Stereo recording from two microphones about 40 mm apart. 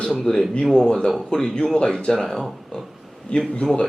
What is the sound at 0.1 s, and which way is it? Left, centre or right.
Speech, centre.